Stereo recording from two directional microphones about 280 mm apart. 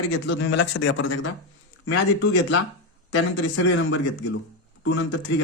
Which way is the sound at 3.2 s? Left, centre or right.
Left.